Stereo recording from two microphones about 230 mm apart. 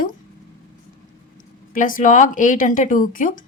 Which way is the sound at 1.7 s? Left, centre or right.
Left.